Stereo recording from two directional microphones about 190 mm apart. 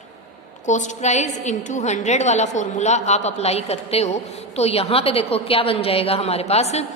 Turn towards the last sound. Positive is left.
turn(degrees=35)  # may be behind; listen again after turning